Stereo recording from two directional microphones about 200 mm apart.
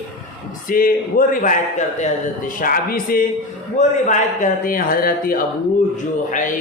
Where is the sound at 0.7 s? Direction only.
45° left (ahead or behind).